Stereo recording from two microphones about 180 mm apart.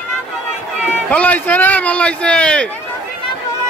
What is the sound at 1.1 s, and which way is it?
A man's voice, 10° left (ahead or behind).